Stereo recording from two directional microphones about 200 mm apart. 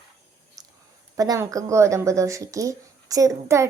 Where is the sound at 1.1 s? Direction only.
15° right (ahead or behind).